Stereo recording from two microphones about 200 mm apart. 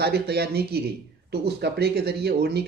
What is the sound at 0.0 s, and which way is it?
A man's voice, 55° right (ahead or behind).